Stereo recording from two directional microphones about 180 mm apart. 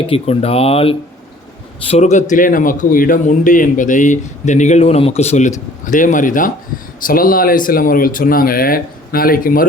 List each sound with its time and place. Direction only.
0.1 s speech: 35° left (ahead or behind); by 9.6 s 50° left (ahead or behind)